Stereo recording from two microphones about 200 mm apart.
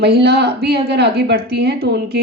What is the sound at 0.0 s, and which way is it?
Speech, 55° right (ahead or behind).